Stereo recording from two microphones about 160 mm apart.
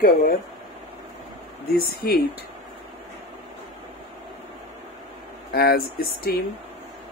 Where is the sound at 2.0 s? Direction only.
80° left.